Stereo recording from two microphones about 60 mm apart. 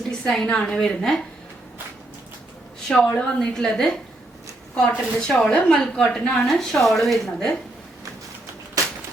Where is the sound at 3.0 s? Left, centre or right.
Centre.